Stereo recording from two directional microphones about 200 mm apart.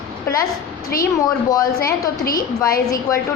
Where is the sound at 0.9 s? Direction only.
45° left (ahead or behind).